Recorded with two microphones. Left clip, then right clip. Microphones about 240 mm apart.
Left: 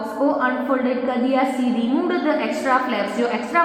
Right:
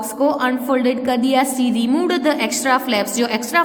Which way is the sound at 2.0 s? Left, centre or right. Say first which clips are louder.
Right 2 dB; right.